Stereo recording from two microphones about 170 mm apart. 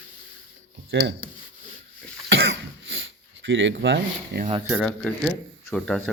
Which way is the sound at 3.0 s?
90° right.